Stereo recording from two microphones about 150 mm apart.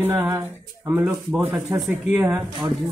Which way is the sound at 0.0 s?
15° right (ahead or behind).